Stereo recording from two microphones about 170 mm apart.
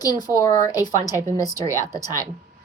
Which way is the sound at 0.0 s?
20° left (ahead or behind).